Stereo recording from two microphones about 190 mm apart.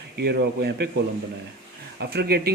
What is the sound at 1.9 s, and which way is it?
Speech, 55° right (ahead or behind).